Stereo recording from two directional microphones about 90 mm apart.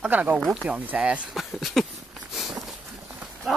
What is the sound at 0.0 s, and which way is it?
Speech, 15° right (ahead or behind).